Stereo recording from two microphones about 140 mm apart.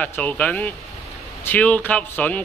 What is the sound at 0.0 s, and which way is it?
A woman's voice, 10° left (ahead or behind).